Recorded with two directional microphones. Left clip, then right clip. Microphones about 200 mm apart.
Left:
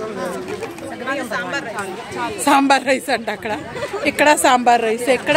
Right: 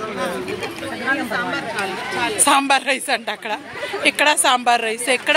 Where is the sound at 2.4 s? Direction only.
Centre (ahead or behind).